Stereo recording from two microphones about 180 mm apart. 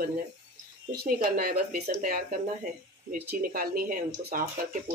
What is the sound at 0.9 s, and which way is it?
Speech, 55° right (ahead or behind).